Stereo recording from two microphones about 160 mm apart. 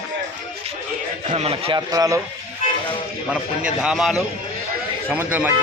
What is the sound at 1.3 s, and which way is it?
Speech, 40° right (ahead or behind).